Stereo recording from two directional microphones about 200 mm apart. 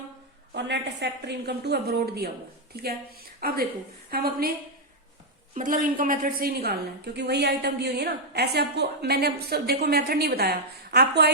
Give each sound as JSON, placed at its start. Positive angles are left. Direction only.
{"t": 0.5, "sound": "a woman's voice", "side_deg": -60}
{"t": 5.5, "sound": "a woman's voice", "side_deg": -40}